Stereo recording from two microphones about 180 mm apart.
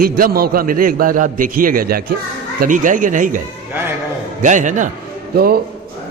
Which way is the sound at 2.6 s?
45° right (ahead or behind).